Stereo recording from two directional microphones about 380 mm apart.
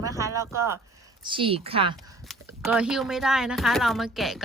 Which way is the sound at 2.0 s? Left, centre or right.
Centre.